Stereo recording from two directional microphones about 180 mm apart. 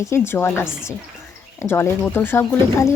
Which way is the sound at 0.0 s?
15° left (ahead or behind).